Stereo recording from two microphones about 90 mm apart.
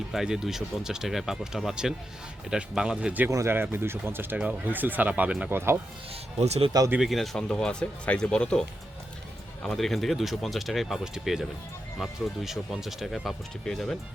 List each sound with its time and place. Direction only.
0.1 s speech: 5° right (ahead or behind)
3.2 s speech: 30° right (ahead or behind); by 5.5 s 15° right (ahead or behind)
5.5 s speech: 25° right (ahead or behind)
7.0 s speech: centre (ahead or behind)
9.6 s speech: centre (ahead or behind)